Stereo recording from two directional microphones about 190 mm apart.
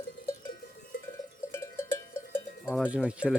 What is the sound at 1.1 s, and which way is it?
Cowbell, 15° left (ahead or behind).